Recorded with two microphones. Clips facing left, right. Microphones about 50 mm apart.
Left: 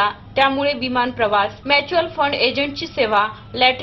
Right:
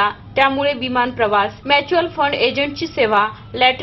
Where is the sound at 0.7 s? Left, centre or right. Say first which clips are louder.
Right 2 dB; right.